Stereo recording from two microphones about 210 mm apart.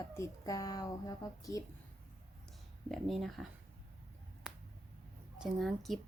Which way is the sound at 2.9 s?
Centre (ahead or behind).